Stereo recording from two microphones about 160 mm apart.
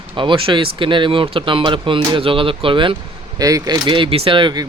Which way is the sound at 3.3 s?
20° right (ahead or behind).